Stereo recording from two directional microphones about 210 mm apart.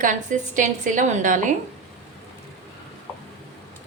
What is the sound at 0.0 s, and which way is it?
A woman's voice, 40° right (ahead or behind).